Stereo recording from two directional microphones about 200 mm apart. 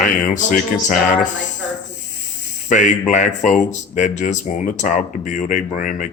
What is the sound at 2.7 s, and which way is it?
Speech, 40° left (ahead or behind).